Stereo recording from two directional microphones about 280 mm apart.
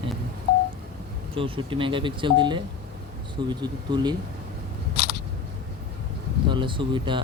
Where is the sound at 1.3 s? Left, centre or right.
Centre.